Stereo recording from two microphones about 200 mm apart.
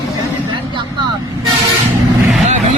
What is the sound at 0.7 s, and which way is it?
Speech, 20° right (ahead or behind).